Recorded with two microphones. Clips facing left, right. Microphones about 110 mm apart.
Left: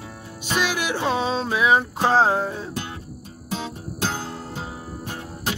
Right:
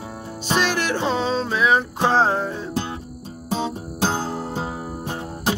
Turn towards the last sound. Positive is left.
turn(degrees=-30)  # may be behind; listen again after turning